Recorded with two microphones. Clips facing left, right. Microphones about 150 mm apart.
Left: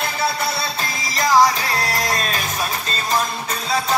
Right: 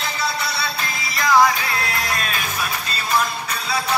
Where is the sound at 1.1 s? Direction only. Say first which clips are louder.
Left 1 dB; 40° left (ahead or behind).